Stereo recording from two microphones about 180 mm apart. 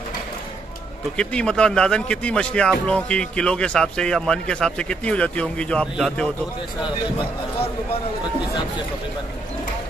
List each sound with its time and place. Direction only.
1.1 s a man's voice: 5° left (ahead or behind)